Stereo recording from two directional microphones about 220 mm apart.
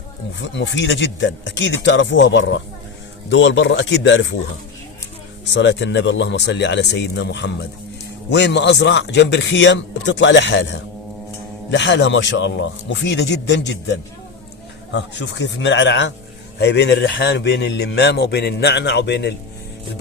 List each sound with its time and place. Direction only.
0.3 s speech: 55° left (ahead or behind)
5.5 s a man's voice: 55° left (ahead or behind)